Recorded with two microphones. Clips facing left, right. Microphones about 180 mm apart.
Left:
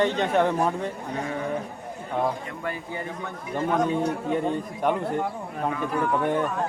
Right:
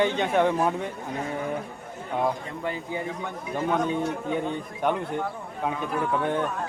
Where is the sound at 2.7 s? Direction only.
20° right (ahead or behind).